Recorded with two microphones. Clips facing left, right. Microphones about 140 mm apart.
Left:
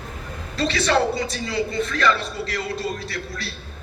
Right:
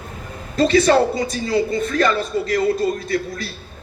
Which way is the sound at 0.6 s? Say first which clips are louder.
Right 6 dB; 45° right (ahead or behind).